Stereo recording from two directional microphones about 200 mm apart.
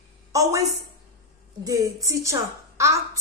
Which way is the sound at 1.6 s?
15° right (ahead or behind).